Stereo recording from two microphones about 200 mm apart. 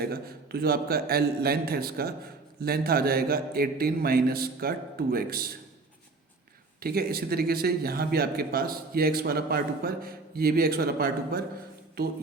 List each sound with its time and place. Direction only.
0.0 s a man's voice: 50° right (ahead or behind)
6.7 s a man's voice: 50° right (ahead or behind)